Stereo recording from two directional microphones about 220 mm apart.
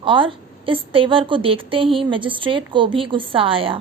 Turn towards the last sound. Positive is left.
turn(degrees=-25)  # may be behind; listen again after turning